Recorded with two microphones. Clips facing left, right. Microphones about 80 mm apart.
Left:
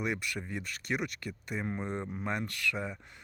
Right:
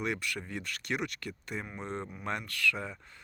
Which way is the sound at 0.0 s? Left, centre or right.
Centre.